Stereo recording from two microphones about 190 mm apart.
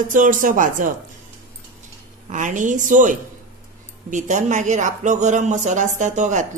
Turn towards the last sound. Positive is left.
turn(degrees=-40)  # may be behind; listen again after turning